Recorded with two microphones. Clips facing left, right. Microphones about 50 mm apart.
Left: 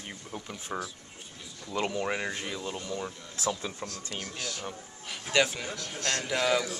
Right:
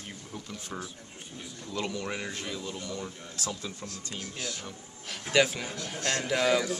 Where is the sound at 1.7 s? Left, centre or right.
Left.